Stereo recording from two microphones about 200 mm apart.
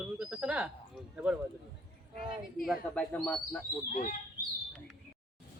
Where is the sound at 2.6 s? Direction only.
5° left (ahead or behind).